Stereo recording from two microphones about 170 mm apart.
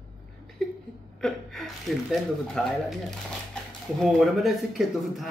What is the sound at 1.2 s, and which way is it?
A woman's voice, centre (ahead or behind).